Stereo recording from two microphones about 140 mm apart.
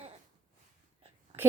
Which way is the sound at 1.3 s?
45° right (ahead or behind).